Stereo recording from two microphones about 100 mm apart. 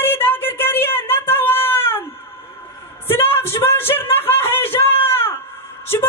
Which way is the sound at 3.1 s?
25° left (ahead or behind).